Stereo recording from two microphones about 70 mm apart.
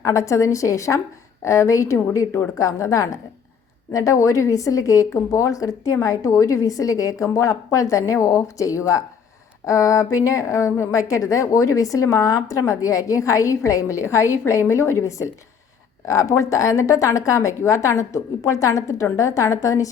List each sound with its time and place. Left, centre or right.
0.0 s a woman's voice: left